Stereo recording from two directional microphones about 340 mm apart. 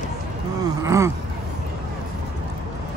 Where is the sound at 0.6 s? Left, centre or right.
Centre.